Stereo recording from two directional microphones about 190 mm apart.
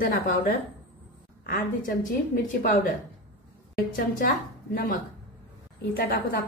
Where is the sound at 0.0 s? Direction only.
50° left (ahead or behind).